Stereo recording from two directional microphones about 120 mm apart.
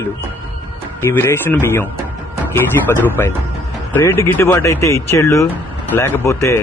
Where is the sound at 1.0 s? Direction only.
20° left (ahead or behind).